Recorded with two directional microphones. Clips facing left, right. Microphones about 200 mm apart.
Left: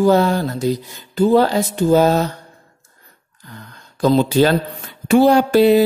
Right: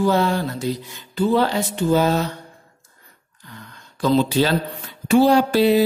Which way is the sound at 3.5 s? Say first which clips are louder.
Left 2 dB; 45° left (ahead or behind).